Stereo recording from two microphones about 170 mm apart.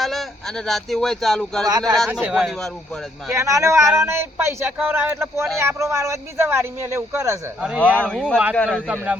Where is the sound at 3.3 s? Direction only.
20° right (ahead or behind).